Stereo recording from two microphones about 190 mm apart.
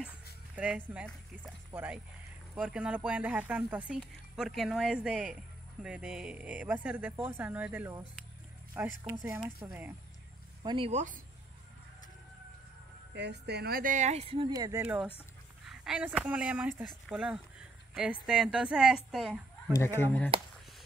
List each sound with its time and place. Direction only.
0.6 s speech: 5° right (ahead or behind)
10.6 s speech: 25° right (ahead or behind)
10.9 s speech: 40° right (ahead or behind)
13.1 s speech: 60° right (ahead or behind); by 14.5 s 30° right (ahead or behind)
14.5 s speech: 20° right (ahead or behind)
14.8 s speech: 5° right (ahead or behind)
19.7 s speech: 15° left (ahead or behind)